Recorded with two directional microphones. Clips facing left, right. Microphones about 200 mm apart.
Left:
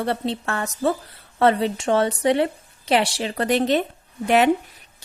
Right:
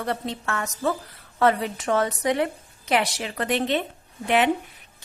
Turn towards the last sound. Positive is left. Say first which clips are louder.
# left 4 dB
turn(degrees=40)  # may be behind; listen again after turning